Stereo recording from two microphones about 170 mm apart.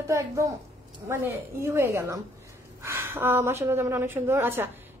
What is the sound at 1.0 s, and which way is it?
A woman's voice, 15° right (ahead or behind).